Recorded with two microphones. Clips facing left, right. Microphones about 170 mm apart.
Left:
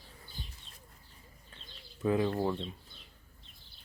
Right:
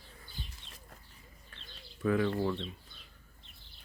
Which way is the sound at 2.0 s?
25° left (ahead or behind).